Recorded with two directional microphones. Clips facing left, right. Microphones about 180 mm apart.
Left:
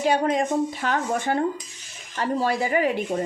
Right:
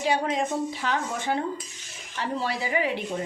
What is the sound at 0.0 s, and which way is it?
Speech, 50° left (ahead or behind).